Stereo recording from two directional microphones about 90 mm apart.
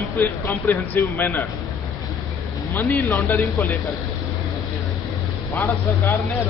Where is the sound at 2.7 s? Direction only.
20° left (ahead or behind).